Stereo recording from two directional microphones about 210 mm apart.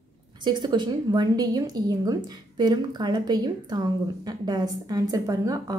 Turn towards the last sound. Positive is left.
turn(degrees=-15)  # may be behind; listen again after turning